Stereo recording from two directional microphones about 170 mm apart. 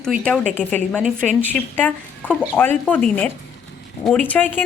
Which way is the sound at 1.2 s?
Centre (ahead or behind).